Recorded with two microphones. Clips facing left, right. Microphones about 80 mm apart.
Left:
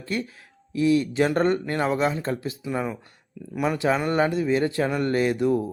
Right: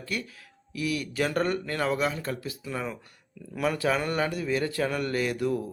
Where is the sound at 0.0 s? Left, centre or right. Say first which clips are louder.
Left 5 dB; left.